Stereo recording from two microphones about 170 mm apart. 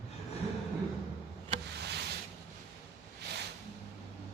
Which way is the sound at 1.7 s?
80° right.